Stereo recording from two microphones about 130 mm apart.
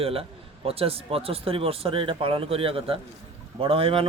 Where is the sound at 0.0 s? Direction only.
45° right (ahead or behind).